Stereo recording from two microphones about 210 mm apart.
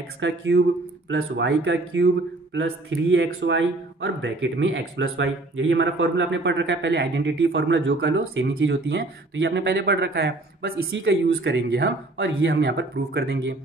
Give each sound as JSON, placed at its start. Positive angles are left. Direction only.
{"t": 0.2, "sound": "speech", "side_deg": -55}